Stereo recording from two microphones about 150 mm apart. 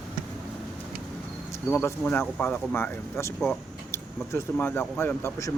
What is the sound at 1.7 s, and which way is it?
Speech, 15° left (ahead or behind).